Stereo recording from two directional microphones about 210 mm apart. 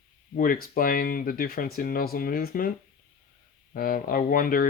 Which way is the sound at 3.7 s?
40° left (ahead or behind).